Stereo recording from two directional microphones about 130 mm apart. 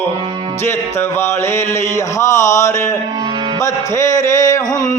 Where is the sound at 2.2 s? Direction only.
25° left (ahead or behind).